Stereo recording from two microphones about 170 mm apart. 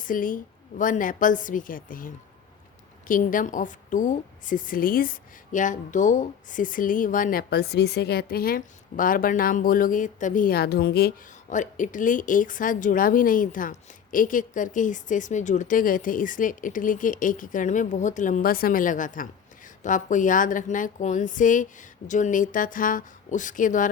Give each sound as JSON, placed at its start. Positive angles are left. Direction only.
{"t": 0.0, "sound": "a woman's voice", "side_deg": 55}
{"t": 11.4, "sound": "a woman's voice", "side_deg": 50}